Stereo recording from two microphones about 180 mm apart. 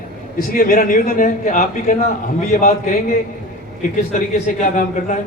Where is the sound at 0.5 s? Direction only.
50° left (ahead or behind).